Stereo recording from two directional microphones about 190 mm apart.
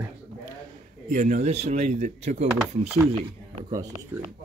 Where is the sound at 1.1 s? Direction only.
40° right (ahead or behind).